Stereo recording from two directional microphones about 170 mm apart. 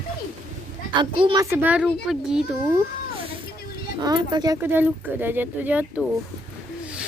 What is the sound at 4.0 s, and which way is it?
Speech, 25° right (ahead or behind).